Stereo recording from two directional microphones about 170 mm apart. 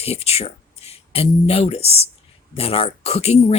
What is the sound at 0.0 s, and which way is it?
Speech, 35° left (ahead or behind).